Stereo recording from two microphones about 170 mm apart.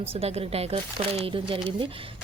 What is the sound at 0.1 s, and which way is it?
Speech, 35° right (ahead or behind).